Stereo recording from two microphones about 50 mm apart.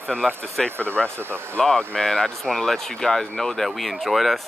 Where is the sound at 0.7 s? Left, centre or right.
Right.